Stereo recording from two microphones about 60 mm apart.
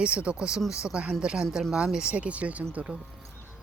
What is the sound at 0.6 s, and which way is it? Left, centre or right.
Speech, left.